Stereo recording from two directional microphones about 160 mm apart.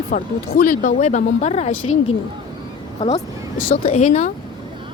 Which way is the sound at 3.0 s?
45° left (ahead or behind).